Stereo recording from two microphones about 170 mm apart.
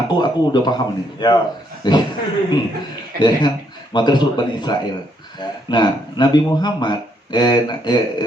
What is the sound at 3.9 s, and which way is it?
A man's voice, 25° left (ahead or behind).